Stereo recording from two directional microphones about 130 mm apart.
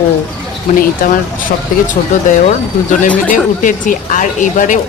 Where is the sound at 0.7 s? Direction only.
90° left.